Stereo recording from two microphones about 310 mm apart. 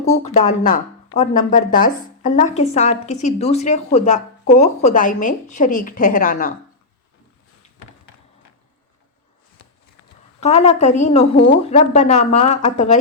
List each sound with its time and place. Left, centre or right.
0.3 s a woman's voice: left
10.4 s a woman's voice: left